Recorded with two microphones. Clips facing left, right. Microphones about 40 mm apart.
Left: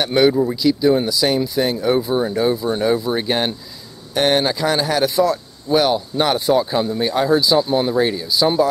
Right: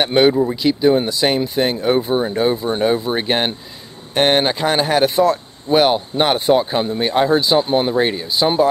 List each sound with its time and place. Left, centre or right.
0.0 s speech: right
0.3 s speech: centre
0.6 s speech: right